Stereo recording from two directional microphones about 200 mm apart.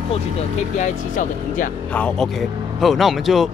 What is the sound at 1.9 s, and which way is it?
Speech, 5° left (ahead or behind).